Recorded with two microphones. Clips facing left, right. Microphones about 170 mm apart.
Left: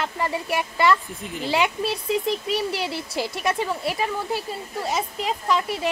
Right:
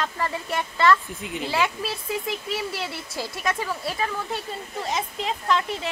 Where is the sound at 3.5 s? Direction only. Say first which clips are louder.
Left 2 dB; 30° left (ahead or behind).